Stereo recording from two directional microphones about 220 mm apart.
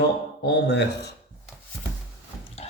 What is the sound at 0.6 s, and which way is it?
Speech, 50° left (ahead or behind).